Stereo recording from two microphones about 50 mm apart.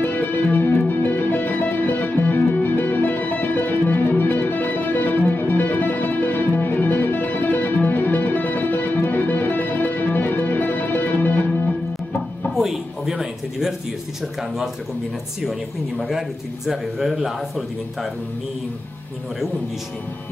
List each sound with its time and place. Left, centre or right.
0.0 s music: left
12.5 s a sound: centre
16.1 s speech: centre